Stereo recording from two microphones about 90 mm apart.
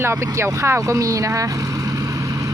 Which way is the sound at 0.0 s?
30° right (ahead or behind).